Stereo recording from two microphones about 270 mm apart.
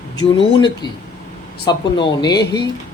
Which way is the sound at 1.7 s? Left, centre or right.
Centre.